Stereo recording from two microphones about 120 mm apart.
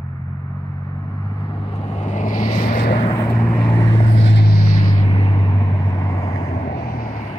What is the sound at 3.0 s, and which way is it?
Vehicle, 50° left (ahead or behind).